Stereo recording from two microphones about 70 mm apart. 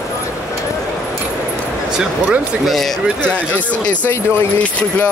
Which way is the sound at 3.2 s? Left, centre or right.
Centre.